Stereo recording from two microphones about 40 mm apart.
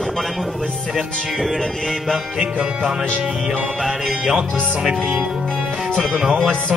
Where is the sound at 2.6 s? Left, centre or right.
Centre.